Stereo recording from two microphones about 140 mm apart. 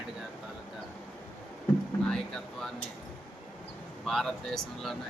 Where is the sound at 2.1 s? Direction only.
5° left (ahead or behind).